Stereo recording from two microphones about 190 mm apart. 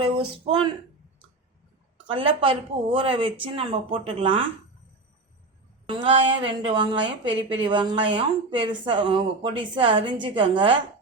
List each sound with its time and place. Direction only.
0.0 s a woman's voice: 25° right (ahead or behind)
2.0 s a woman's voice: 25° right (ahead or behind)
5.9 s a woman's voice: 25° right (ahead or behind)